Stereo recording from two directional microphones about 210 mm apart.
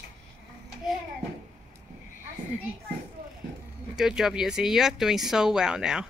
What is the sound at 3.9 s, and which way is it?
Speech, 5° right (ahead or behind).